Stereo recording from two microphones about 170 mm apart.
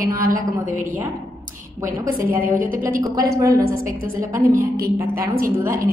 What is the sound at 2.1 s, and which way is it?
Speech, 55° right (ahead or behind).